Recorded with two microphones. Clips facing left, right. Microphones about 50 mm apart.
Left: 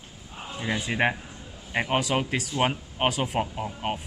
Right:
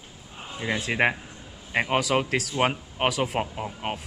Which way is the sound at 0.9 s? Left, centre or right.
Right.